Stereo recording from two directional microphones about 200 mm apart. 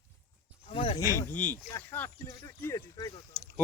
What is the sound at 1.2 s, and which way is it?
Speech, 10° left (ahead or behind).